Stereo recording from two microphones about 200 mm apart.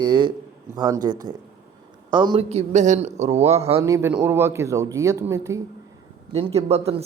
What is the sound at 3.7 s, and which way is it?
Speech, 15° right (ahead or behind).